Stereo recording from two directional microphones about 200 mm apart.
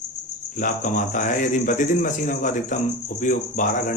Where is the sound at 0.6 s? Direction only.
40° left (ahead or behind).